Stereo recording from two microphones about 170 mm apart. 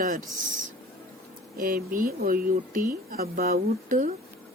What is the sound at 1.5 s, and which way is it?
Speech, 55° right (ahead or behind).